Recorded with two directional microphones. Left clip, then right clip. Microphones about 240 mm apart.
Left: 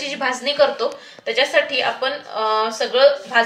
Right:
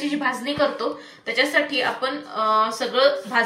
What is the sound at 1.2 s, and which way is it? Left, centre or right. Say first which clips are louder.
A woman's voice: left 3 dB; left.